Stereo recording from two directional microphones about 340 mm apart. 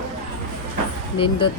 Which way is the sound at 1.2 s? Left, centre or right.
Centre.